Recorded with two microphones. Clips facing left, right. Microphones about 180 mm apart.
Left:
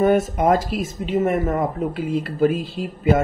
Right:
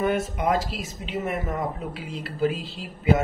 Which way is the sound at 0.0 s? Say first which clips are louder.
Left 7 dB; 45° left (ahead or behind).